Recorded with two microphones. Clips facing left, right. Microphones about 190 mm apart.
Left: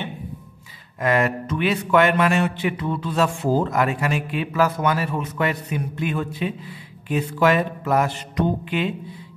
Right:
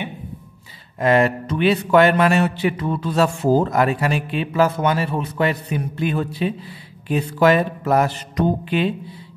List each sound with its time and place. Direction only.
0.9 s a man's voice: 30° right (ahead or behind)